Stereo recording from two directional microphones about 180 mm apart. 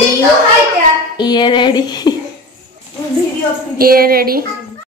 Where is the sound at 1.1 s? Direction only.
25° left (ahead or behind).